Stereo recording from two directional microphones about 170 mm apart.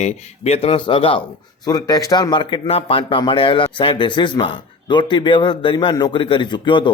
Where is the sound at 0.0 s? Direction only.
40° left (ahead or behind).